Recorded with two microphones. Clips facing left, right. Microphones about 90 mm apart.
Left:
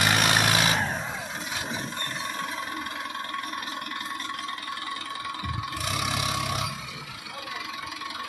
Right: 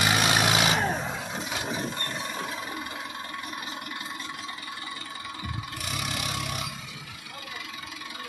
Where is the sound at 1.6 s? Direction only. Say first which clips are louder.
Right 1 dB; centre (ahead or behind).